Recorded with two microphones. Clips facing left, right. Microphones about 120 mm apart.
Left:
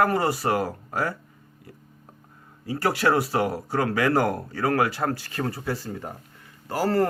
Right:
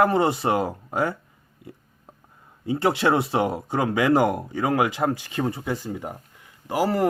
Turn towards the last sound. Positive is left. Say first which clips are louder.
# even
turn(degrees=-15)  # may be behind; listen again after turning